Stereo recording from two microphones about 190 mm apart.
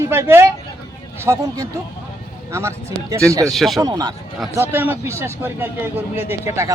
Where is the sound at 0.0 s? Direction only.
15° right (ahead or behind).